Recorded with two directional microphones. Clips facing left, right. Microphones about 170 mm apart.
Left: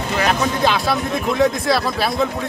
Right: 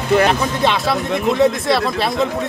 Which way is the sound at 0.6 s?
Centre (ahead or behind).